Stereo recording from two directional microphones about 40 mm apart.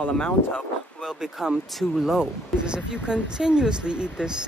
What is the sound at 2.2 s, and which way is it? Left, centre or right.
Speech, right.